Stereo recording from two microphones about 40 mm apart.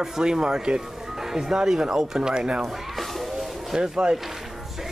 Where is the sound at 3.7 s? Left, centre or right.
Centre.